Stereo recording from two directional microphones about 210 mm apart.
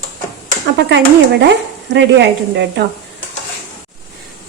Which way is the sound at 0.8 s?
55° right (ahead or behind).